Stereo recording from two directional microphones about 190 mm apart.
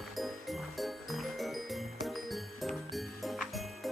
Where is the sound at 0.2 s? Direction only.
Centre (ahead or behind).